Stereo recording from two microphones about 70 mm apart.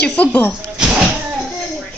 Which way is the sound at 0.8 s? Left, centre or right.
Centre.